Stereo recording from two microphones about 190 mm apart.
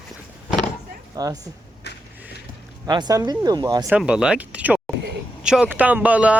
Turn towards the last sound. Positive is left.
turn(degrees=-5)  # may be behind; listen again after turning